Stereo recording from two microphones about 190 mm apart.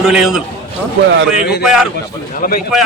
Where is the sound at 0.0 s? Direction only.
5° right (ahead or behind).